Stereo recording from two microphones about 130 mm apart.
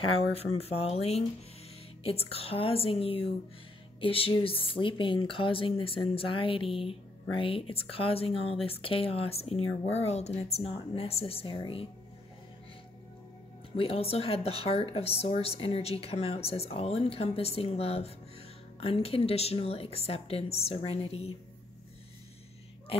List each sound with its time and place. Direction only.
0.2 s speech: 50° left (ahead or behind)
13.7 s speech: 45° left (ahead or behind)